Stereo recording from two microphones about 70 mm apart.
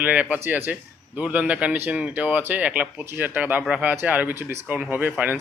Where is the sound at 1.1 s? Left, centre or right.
Centre.